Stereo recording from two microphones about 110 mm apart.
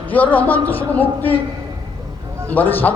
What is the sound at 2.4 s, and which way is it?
Speech, 15° left (ahead or behind).